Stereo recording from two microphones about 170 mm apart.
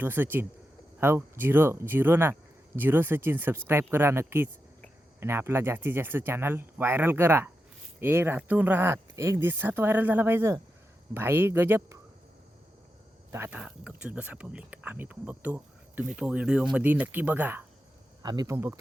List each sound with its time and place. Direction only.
0.0 s speech: 10° right (ahead or behind)
13.3 s speech: 10° right (ahead or behind)
18.2 s speech: 25° right (ahead or behind)